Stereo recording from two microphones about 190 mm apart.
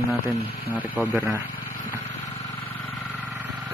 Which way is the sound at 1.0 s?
Centre (ahead or behind).